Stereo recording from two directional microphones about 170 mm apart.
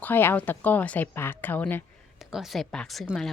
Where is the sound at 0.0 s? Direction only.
10° left (ahead or behind).